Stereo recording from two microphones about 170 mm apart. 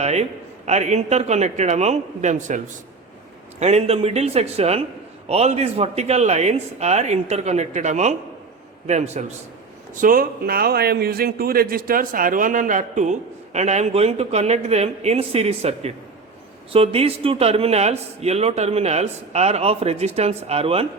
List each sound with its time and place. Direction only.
0.0 s a man's voice: 40° right (ahead or behind)
3.6 s a man's voice: 40° right (ahead or behind)
9.9 s a man's voice: 55° right (ahead or behind); by 20.8 s 35° right (ahead or behind)